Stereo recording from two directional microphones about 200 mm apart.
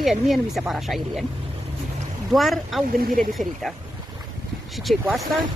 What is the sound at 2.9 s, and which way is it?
Speech, 50° right (ahead or behind).